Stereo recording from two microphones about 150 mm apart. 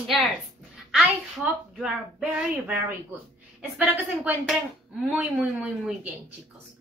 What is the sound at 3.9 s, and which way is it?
A woman's voice, 15° right (ahead or behind).